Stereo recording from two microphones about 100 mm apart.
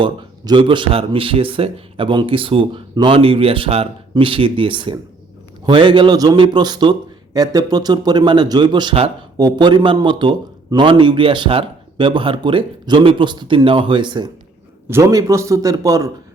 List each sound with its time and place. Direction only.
0.0 s speech: 55° right (ahead or behind)
2.9 s speech: 50° right (ahead or behind)
3.2 s speech: 70° right (ahead or behind)
4.1 s speech: 60° right (ahead or behind)
14.8 s a man's voice: 25° right (ahead or behind)